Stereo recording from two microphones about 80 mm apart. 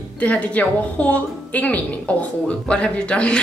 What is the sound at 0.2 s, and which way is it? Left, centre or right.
A woman's voice, centre.